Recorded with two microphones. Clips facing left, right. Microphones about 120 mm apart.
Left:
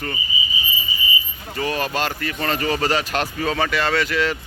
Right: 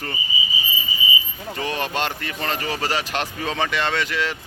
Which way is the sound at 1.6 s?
20° right (ahead or behind).